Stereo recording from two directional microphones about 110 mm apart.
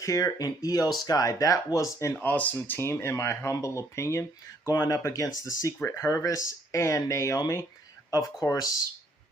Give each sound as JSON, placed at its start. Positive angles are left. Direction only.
{"t": 0.0, "sound": "speech", "side_deg": 30}
{"t": 2.2, "sound": "speech", "side_deg": 15}